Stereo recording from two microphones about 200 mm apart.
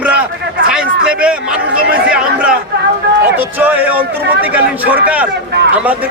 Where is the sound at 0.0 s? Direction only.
5° right (ahead or behind).